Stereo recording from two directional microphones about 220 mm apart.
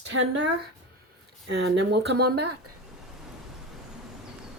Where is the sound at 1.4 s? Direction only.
55° right (ahead or behind).